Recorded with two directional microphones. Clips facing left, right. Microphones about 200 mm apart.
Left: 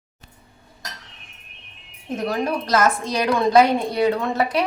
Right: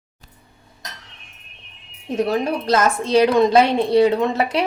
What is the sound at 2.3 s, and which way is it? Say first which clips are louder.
A woman's voice: right 1 dB; 25° right (ahead or behind).